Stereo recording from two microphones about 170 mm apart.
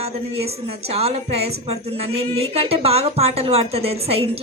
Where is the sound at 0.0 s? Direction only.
35° right (ahead or behind).